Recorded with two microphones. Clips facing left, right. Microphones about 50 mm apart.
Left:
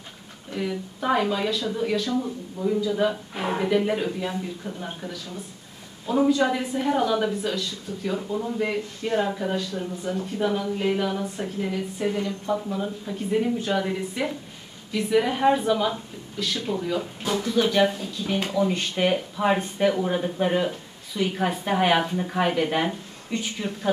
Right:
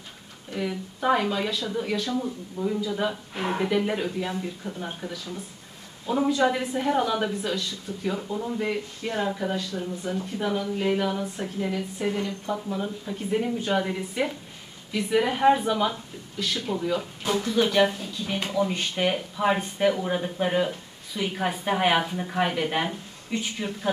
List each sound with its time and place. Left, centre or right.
0.6 s speech: centre